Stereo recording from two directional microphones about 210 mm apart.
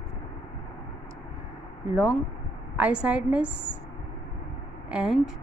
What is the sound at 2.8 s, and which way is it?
Speech, 5° right (ahead or behind).